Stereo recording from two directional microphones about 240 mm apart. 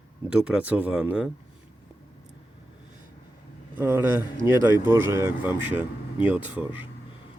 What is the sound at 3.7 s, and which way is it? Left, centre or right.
Speech, centre.